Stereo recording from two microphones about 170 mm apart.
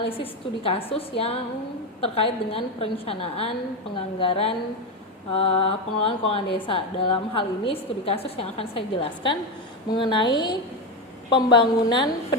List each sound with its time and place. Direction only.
0.2 s a woman's voice: 35° left (ahead or behind)